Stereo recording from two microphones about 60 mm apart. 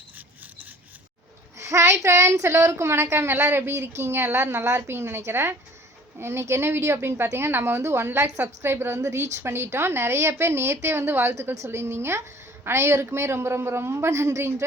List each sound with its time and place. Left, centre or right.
1.5 s speech: right